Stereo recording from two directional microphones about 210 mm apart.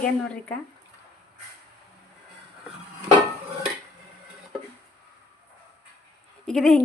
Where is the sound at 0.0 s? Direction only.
5° left (ahead or behind).